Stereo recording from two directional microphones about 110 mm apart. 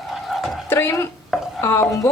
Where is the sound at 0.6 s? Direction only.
20° left (ahead or behind).